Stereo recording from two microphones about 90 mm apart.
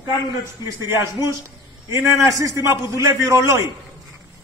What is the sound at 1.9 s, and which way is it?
A man's voice, 35° right (ahead or behind).